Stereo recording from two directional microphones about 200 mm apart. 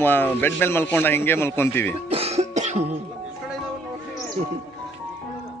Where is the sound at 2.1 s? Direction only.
30° right (ahead or behind).